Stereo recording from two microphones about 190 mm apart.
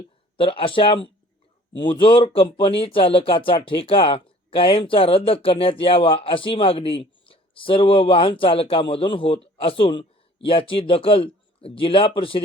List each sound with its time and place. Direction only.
0.3 s speech: 30° left (ahead or behind)